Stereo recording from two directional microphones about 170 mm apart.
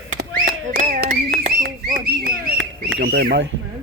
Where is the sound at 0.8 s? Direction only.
55° right (ahead or behind); by 3.5 s 85° right.